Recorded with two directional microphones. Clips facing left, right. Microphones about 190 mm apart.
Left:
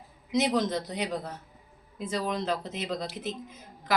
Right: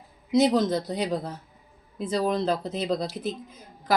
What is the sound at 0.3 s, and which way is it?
Speech, 35° right (ahead or behind).